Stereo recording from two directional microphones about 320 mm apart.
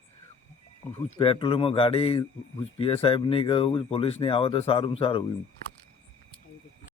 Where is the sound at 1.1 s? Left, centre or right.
Centre.